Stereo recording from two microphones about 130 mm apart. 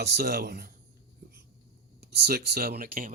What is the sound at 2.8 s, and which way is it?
Speech, 90° right.